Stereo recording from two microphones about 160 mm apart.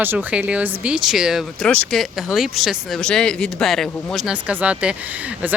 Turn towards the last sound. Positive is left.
turn(degrees=-10)  # may be behind; listen again after turning